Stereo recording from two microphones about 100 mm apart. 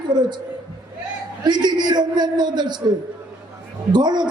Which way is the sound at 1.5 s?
45° right (ahead or behind).